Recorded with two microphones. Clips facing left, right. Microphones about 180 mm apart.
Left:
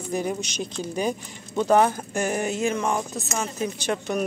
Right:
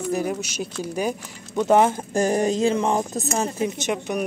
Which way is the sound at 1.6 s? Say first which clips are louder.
Right 2 dB; 20° right (ahead or behind).